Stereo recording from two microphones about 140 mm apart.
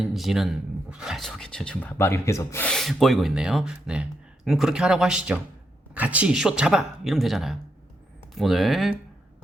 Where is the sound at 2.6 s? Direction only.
5° left (ahead or behind).